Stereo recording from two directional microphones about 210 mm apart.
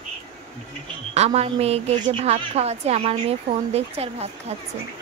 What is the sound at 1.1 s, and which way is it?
A woman's voice, 30° right (ahead or behind).